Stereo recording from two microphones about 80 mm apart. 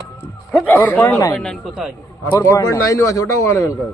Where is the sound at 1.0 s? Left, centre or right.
Left.